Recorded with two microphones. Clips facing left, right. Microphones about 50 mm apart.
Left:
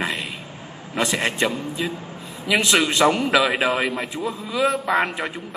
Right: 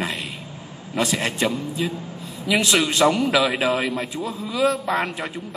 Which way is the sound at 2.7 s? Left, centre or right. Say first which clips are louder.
Left 1 dB; left.